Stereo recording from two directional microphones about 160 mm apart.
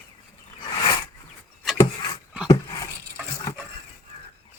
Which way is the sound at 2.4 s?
20° left (ahead or behind).